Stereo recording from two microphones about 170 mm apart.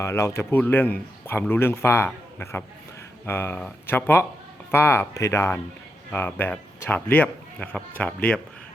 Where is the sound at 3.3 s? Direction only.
15° left (ahead or behind).